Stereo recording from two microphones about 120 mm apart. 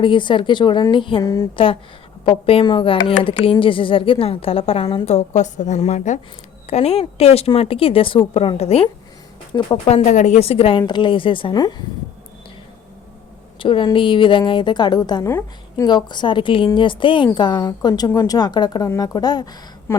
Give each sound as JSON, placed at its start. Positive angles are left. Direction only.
{"t": 0.0, "sound": "a woman's voice", "side_deg": 40}
{"t": 1.2, "sound": "speech", "side_deg": 30}
{"t": 1.5, "sound": "a woman's voice", "side_deg": 45}
{"t": 5.0, "sound": "a woman's voice", "side_deg": 75}
{"t": 6.7, "sound": "speech", "side_deg": 60}
{"t": 9.5, "sound": "a woman's voice", "side_deg": 40}
{"t": 9.8, "sound": "speech", "side_deg": 65}
{"t": 10.4, "sound": "a woman's voice", "side_deg": 55}
{"t": 13.6, "sound": "a woman's voice", "side_deg": 45}
{"t": 15.3, "sound": "a woman's voice", "side_deg": 20}
{"t": 15.9, "sound": "a woman's voice", "side_deg": 40}